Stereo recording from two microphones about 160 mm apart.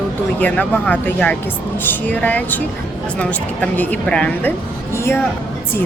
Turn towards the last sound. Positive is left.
turn(degrees=15)  # may be behind; listen again after turning